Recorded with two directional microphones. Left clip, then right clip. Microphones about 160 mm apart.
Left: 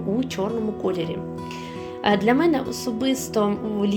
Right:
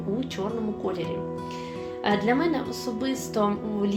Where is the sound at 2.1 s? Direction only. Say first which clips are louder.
Left 5 dB; 70° left (ahead or behind); by 3.9 s 55° left (ahead or behind).